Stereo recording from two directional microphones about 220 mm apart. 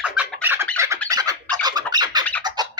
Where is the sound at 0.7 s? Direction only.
15° right (ahead or behind).